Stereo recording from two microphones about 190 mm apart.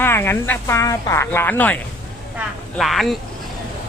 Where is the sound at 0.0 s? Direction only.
15° left (ahead or behind).